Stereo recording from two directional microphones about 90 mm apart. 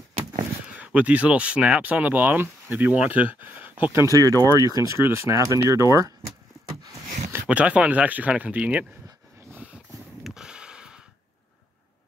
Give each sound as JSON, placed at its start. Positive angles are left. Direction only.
{"t": 0.7, "sound": "speech", "side_deg": -15}
{"t": 3.9, "sound": "speech", "side_deg": -35}
{"t": 5.0, "sound": "speech", "side_deg": -30}
{"t": 7.4, "sound": "speech", "side_deg": -15}
{"t": 10.2, "sound": "a sound", "side_deg": -5}